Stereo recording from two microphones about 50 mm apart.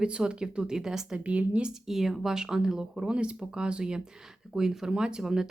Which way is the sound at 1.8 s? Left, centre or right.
Centre.